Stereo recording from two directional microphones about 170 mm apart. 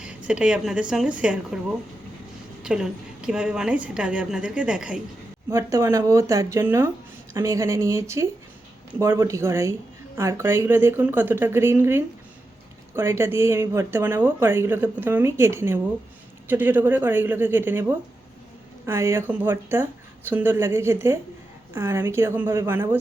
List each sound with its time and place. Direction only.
0.0 s a woman's voice: 5° right (ahead or behind)
2.6 s a woman's voice: 5° right (ahead or behind)
5.5 s speech: 20° right (ahead or behind)